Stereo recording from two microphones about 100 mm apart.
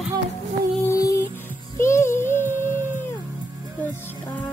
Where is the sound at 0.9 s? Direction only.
30° left (ahead or behind).